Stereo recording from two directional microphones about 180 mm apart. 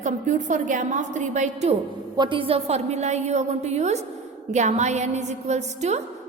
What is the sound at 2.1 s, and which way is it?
A woman's voice, 25° right (ahead or behind).